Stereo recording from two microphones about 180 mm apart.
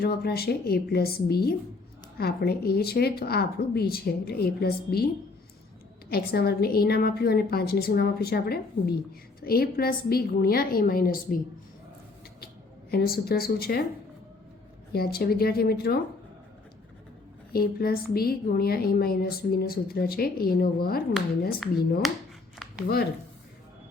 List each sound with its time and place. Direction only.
0.0 s a woman's voice: 60° left (ahead or behind)
6.1 s a woman's voice: 60° left (ahead or behind)
12.9 s a woman's voice: 60° left (ahead or behind)
14.9 s a woman's voice: 60° left (ahead or behind)
17.5 s a woman's voice: 55° left (ahead or behind)